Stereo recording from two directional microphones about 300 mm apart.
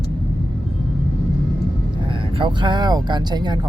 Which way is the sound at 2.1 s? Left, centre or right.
Centre.